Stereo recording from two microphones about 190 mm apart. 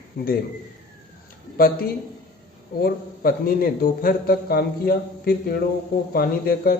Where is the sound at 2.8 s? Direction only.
50° left (ahead or behind).